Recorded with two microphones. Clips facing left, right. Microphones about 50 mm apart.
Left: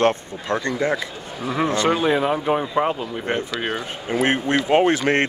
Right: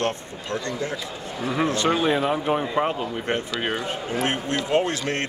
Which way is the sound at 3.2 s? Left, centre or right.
Left.